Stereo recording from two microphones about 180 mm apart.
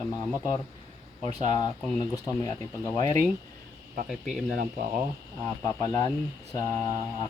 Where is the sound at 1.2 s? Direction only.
20° left (ahead or behind).